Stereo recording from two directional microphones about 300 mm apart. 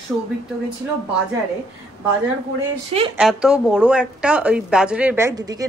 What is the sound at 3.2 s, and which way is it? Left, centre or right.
A woman's voice, centre.